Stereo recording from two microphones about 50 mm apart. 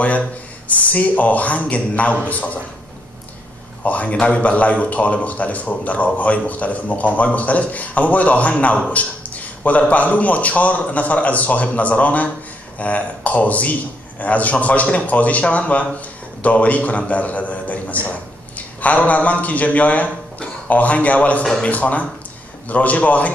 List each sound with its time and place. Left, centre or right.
0.7 s a man's voice: left
3.8 s a man's voice: left